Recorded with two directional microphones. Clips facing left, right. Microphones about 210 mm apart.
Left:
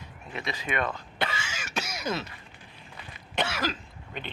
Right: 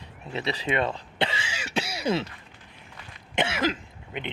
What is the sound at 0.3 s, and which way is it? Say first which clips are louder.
Speech: right 4 dB; 30° right (ahead or behind).